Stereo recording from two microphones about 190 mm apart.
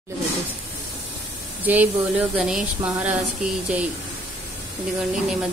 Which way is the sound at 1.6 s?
10° right (ahead or behind).